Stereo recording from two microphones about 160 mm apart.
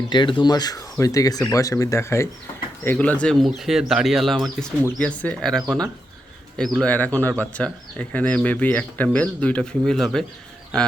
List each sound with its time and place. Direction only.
0.1 s speech: 30° left (ahead or behind); by 10.2 s 5° left (ahead or behind)